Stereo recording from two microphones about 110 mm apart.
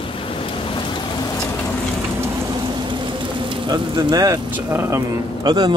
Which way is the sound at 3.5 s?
45° right (ahead or behind).